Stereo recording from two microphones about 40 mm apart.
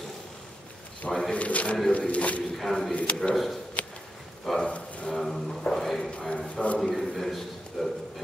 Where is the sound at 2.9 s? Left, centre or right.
Left.